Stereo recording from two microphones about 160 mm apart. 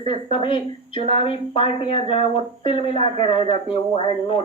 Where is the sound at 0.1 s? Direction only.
35° left (ahead or behind).